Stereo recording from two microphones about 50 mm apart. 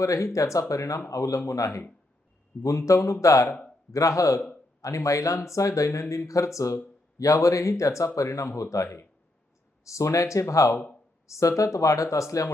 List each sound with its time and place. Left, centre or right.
0.0 s speech: left